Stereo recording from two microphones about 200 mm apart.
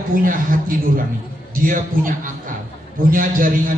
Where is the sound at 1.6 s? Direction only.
40° right (ahead or behind).